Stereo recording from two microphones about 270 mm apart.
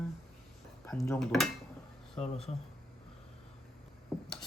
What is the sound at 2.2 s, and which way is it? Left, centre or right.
Speech, left.